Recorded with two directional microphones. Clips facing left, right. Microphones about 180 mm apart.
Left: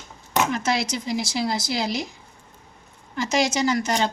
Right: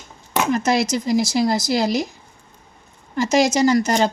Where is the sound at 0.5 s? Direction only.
45° right (ahead or behind).